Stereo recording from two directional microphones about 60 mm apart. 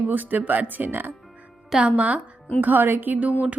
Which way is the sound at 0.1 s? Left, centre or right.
Right.